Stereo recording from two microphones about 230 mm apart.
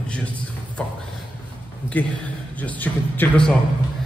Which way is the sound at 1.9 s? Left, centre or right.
Centre.